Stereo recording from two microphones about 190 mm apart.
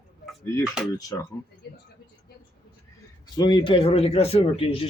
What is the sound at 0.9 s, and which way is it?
Speech, 20° left (ahead or behind).